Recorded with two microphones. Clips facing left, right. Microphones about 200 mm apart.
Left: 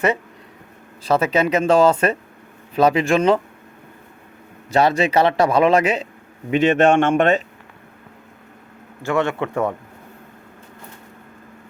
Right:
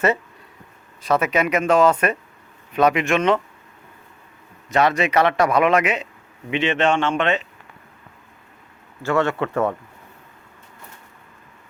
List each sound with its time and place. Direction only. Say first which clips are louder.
1.0 s speech: left 2 dB; 30° left (ahead or behind)
4.7 s speech: left 2 dB; 30° left (ahead or behind)
6.5 s speech: left 5 dB; 45° left (ahead or behind)
9.0 s speech: even; 15° left (ahead or behind)